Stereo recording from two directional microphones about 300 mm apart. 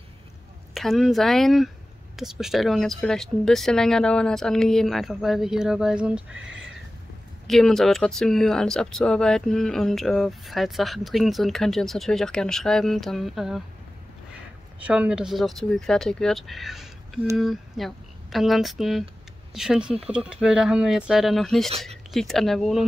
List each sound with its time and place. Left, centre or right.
0.7 s speech: centre
6.3 s speech: right
7.4 s speech: centre
14.8 s speech: centre